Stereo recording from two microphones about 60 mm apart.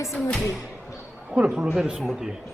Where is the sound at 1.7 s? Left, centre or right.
Centre.